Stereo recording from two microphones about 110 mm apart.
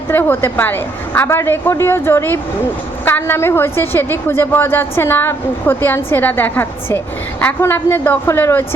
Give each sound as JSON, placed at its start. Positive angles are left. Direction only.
{"t": 0.1, "sound": "a woman's voice", "side_deg": 20}